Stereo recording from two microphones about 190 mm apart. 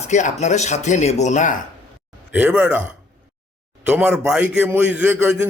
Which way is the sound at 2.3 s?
10° right (ahead or behind).